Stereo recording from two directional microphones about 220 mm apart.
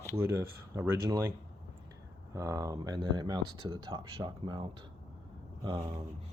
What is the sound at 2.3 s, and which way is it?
Speech, 15° right (ahead or behind).